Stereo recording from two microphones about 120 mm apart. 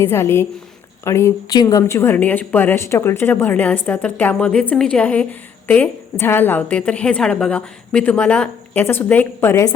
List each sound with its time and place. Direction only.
0.0 s a woman's voice: 20° left (ahead or behind)